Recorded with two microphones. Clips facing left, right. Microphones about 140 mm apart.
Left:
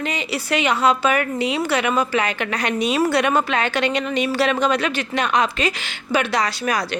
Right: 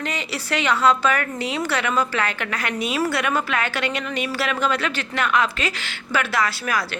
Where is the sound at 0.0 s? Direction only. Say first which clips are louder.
Left 3 dB; 15° left (ahead or behind).